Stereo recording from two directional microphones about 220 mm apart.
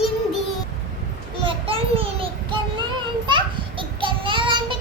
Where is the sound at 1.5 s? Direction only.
25° right (ahead or behind).